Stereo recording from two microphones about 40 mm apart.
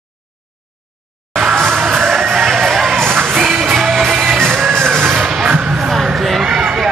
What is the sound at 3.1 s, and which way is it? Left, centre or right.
Music, right.